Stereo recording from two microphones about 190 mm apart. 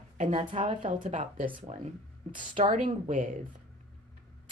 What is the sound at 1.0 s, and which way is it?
Speech, 40° right (ahead or behind).